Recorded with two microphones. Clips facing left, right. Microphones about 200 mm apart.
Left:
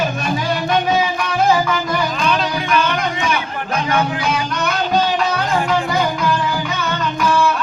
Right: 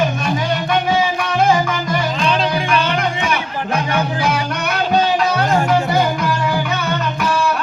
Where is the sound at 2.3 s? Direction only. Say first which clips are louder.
Right 3 dB; 30° right (ahead or behind).